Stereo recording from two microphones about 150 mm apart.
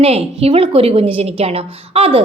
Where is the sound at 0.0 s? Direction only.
45° right (ahead or behind).